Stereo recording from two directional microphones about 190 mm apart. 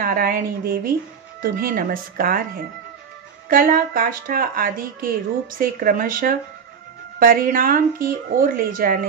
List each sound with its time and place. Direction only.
0.0 s a woman's voice: 50° right (ahead or behind)
3.4 s a woman's voice: 45° right (ahead or behind)